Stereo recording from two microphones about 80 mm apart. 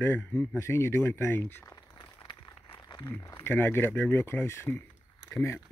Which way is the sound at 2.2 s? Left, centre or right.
Left.